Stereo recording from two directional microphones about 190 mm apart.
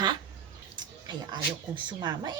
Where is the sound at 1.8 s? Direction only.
20° right (ahead or behind).